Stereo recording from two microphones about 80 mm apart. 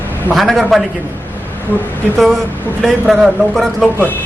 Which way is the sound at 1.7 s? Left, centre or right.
Left.